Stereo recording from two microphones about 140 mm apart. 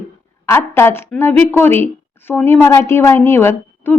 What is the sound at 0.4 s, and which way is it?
A woman's voice, 20° left (ahead or behind).